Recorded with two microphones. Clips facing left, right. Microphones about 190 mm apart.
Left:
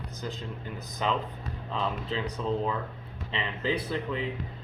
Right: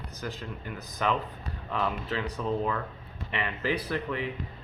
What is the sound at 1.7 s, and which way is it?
Speech, 25° left (ahead or behind).